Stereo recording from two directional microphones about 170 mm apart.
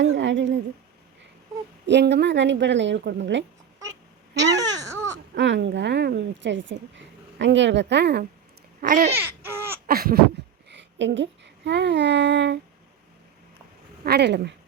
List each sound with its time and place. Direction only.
0.0 s a sound: 90° right
1.9 s speech: 90° right
4.8 s baby cry: 20° right (ahead or behind)
5.3 s speech: 85° right
8.8 s babbling: 50° right (ahead or behind)
9.1 s laughter: 15° right (ahead or behind)
9.8 s a sound: 60° right (ahead or behind)
10.7 s a woman's voice: 90° right
14.0 s speech: 75° right (ahead or behind)